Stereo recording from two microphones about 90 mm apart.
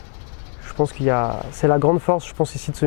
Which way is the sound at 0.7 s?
20° left (ahead or behind).